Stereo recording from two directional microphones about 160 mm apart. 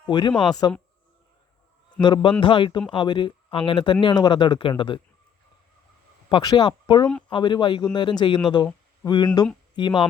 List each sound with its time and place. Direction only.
0.1 s speech: 30° left (ahead or behind)
2.0 s a man's voice: 30° left (ahead or behind)
6.2 s speech: 30° left (ahead or behind)